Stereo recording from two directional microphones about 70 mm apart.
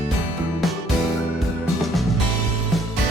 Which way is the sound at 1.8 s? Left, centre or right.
Centre.